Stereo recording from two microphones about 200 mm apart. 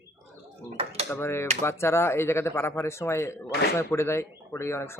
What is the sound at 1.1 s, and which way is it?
Speech, 10° left (ahead or behind).